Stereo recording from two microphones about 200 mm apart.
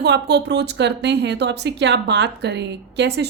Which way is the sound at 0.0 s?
60° right (ahead or behind).